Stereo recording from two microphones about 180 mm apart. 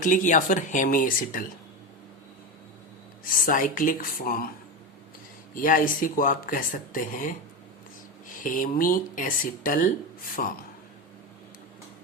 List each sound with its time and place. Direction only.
0.0 s speech: 45° left (ahead or behind)
3.2 s speech: 50° left (ahead or behind)
5.5 s speech: 50° left (ahead or behind)
8.4 s speech: 50° left (ahead or behind)